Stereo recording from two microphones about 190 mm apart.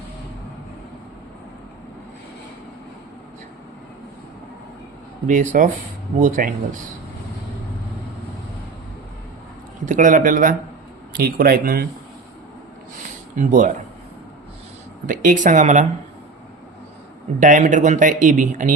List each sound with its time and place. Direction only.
5.2 s speech: 40° right (ahead or behind)
9.8 s speech: 40° right (ahead or behind)
13.3 s speech: 40° right (ahead or behind)
15.0 s speech: 45° right (ahead or behind)
17.4 s speech: 40° right (ahead or behind)